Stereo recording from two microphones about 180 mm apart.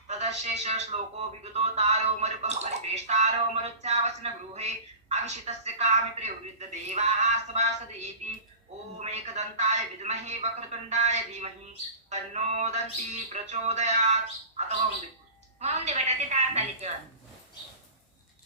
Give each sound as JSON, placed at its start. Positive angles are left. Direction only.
{"t": 0.1, "sound": "speech", "side_deg": -40}
{"t": 15.6, "sound": "speech", "side_deg": -40}